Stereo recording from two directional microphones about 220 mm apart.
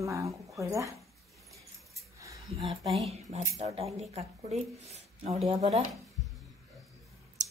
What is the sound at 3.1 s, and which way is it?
Speech, 30° right (ahead or behind).